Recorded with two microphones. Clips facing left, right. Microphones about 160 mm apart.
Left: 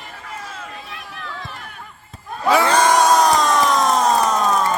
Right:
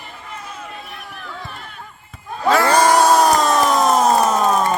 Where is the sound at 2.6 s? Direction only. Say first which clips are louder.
Right 3 dB; 10° right (ahead or behind).